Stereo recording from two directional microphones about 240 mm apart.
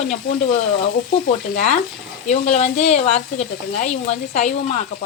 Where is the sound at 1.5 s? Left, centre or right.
Left.